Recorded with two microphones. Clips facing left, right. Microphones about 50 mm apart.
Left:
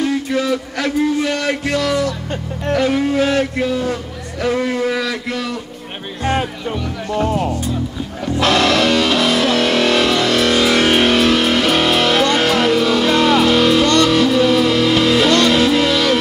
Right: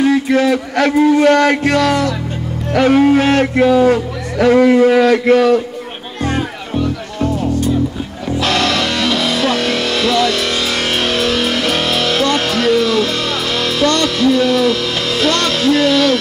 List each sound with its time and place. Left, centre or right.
0.0 s music: right
2.7 s speech: right
8.4 s music: left